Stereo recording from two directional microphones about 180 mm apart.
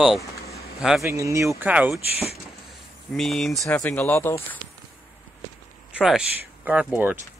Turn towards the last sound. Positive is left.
turn(degrees=-10)  # may be behind; listen again after turning